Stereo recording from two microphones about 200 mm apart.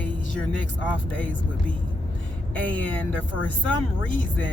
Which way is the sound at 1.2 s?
5° left (ahead or behind).